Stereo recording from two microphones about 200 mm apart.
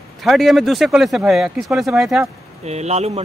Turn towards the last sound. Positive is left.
turn(degrees=-30)  # may be behind; listen again after turning